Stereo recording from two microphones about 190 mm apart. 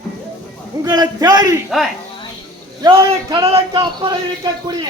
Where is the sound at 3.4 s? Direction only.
30° right (ahead or behind).